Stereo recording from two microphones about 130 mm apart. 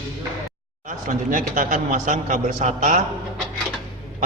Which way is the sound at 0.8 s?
80° right.